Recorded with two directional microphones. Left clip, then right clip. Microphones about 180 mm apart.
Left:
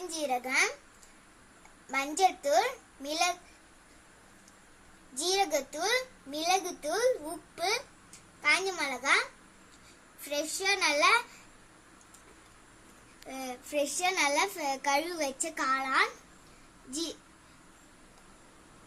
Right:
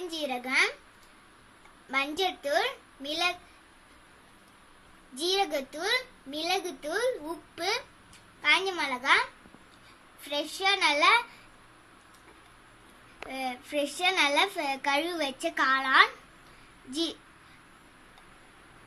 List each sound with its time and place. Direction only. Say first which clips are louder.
0.1 s a child's voice: even; 25° right (ahead or behind)
1.9 s a child's voice: left 1 dB; 25° right (ahead or behind)
5.1 s a child's voice: right 1 dB; 30° right (ahead or behind)
13.2 s a child's voice: right 5 dB; 20° right (ahead or behind)